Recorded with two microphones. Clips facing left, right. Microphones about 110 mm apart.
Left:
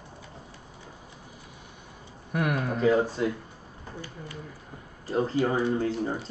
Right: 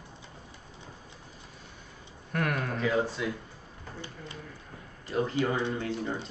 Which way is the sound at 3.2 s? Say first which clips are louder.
Left 5 dB; 45° left (ahead or behind).